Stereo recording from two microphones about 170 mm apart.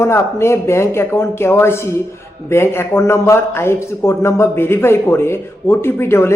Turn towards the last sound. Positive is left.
turn(degrees=15)  # may be behind; listen again after turning